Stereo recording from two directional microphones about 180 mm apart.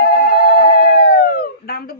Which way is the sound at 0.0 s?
55° left (ahead or behind).